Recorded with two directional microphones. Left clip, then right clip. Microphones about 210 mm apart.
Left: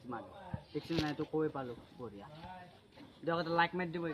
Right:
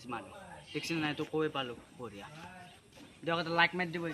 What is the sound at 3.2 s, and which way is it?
Speech, 20° right (ahead or behind).